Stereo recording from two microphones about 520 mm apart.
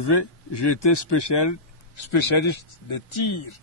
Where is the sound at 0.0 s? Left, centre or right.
Left.